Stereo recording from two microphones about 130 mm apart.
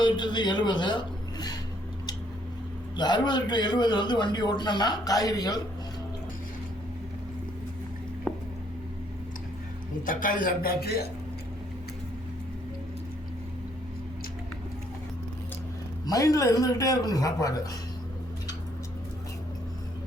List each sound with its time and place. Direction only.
0.0 s a man's voice: 35° left (ahead or behind)
2.9 s a man's voice: 35° left (ahead or behind)
8.3 s a sound: 10° left (ahead or behind)
10.1 s a man's voice: 90° left
16.0 s a man's voice: 25° left (ahead or behind)